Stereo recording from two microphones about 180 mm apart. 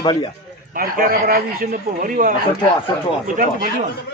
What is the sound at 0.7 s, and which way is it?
A man's voice, 55° right (ahead or behind).